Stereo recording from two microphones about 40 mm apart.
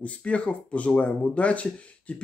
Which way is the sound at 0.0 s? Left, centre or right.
Left.